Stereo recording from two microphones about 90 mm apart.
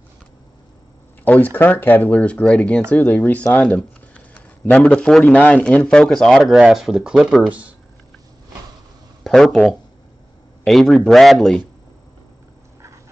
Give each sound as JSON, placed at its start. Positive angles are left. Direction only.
{"t": 1.2, "sound": "speech", "side_deg": 20}
{"t": 2.9, "sound": "speech", "side_deg": 20}
{"t": 3.5, "sound": "a sound", "side_deg": 15}
{"t": 5.3, "sound": "speech", "side_deg": 15}
{"t": 7.4, "sound": "speech", "side_deg": -15}
{"t": 9.2, "sound": "speech", "side_deg": 0}